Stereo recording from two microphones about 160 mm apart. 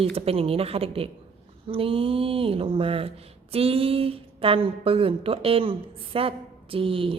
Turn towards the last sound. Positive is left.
turn(degrees=-35)  # may be behind; listen again after turning